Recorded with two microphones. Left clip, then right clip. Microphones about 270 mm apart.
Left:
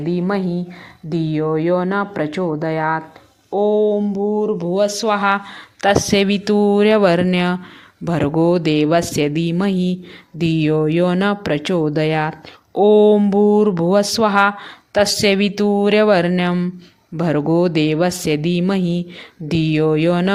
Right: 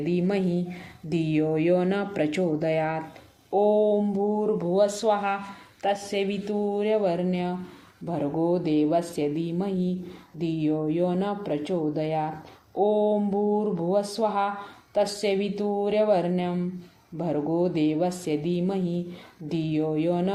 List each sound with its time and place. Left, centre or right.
0.0 s speech: centre
3.5 s a sound: left
4.6 s speech: left